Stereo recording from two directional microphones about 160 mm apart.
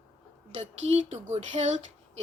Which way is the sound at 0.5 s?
45° right (ahead or behind).